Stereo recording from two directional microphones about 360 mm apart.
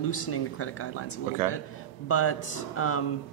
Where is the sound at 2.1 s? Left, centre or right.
Left.